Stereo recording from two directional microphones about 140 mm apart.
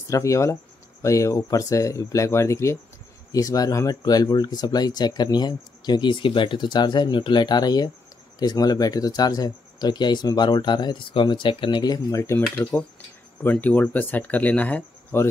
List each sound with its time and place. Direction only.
0.1 s speech: 20° left (ahead or behind)